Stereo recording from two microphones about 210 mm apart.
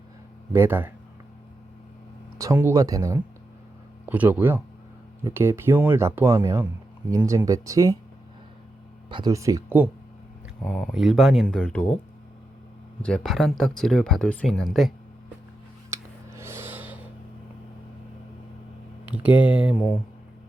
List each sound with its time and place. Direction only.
0.5 s speech: 10° right (ahead or behind)
2.4 s speech: 15° right (ahead or behind)
9.0 s speech: 20° right (ahead or behind)
10.6 s speech: 5° left (ahead or behind)
13.0 s speech: 5° left (ahead or behind)
15.9 s a sound: 15° right (ahead or behind)
19.0 s speech: 5° right (ahead or behind)